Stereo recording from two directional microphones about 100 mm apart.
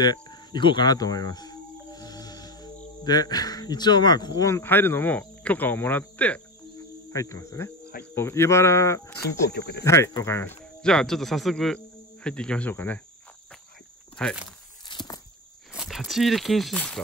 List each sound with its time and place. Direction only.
0.0 s cricket: 45° left (ahead or behind)
4.5 s speech: 25° left (ahead or behind)
7.1 s cricket: 30° left (ahead or behind)
8.0 s speech: 25° left (ahead or behind)
10.8 s speech: 5° left (ahead or behind)
14.2 s speech: 10° left (ahead or behind)
14.9 s walk: 50° left (ahead or behind)
15.7 s speech: 5° right (ahead or behind)